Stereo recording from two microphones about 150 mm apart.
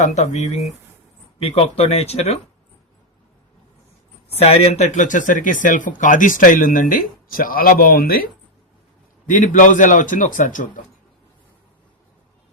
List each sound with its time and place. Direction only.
0.0 s speech: 50° left (ahead or behind)
4.3 s speech: 45° left (ahead or behind); by 8.3 s 80° left
9.2 s speech: 60° left (ahead or behind)